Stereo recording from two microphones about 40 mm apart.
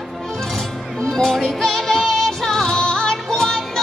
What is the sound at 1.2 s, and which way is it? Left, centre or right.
Music, centre.